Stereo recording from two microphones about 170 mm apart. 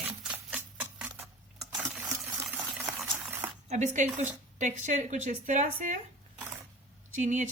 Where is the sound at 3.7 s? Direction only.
45° right (ahead or behind).